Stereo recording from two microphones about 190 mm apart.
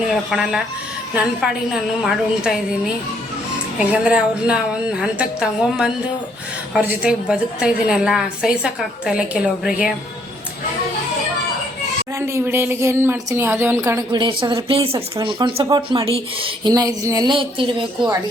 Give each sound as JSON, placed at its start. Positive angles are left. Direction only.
{"t": 0.1, "sound": "a woman's voice", "side_deg": 0}
{"t": 1.7, "sound": "a woman's voice", "side_deg": -5}
{"t": 3.8, "sound": "a woman's voice", "side_deg": -5}
{"t": 12.3, "sound": "a woman's voice", "side_deg": -10}